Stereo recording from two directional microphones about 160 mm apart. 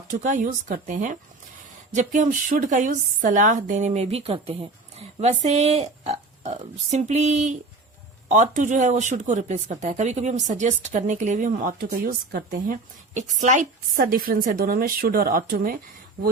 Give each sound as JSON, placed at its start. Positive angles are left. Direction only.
{"t": 0.1, "sound": "speech", "side_deg": -50}